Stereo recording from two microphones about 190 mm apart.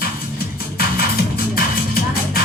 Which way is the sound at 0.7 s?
50° left (ahead or behind).